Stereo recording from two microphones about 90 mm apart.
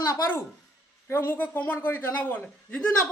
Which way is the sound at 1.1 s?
25° left (ahead or behind).